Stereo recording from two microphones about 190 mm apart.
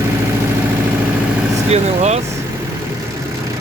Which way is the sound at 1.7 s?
35° right (ahead or behind).